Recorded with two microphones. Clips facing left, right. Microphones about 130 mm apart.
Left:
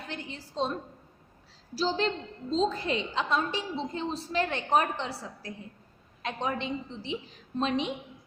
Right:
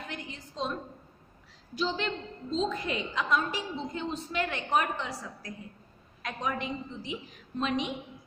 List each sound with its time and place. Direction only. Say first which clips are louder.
0.1 s a woman's voice: left 2 dB; 30° left (ahead or behind)